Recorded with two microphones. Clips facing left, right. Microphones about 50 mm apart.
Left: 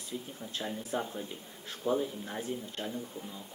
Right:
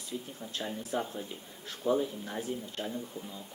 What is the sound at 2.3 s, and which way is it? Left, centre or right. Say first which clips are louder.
Speech: right 1 dB; centre.